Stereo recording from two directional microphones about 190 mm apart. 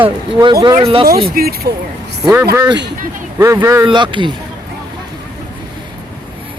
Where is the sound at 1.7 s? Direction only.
50° right (ahead or behind).